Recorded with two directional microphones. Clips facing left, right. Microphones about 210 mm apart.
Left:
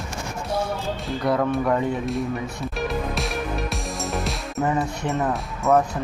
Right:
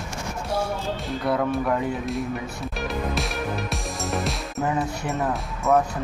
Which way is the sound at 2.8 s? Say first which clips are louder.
Left 1 dB; centre (ahead or behind).